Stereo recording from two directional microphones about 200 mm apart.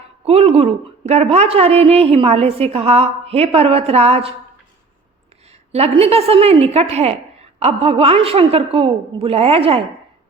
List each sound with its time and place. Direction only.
0.3 s a woman's voice: 30° right (ahead or behind)
5.7 s a woman's voice: 30° right (ahead or behind)